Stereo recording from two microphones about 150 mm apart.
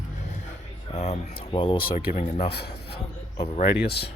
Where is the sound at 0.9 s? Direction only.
45° left (ahead or behind).